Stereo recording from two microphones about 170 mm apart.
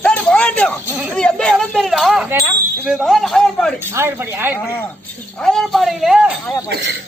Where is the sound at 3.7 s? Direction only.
15° right (ahead or behind).